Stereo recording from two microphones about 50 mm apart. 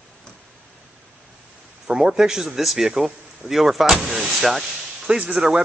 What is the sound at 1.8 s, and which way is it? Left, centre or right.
A man's voice, centre.